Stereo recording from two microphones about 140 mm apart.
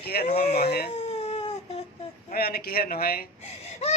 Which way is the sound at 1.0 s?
45° left (ahead or behind).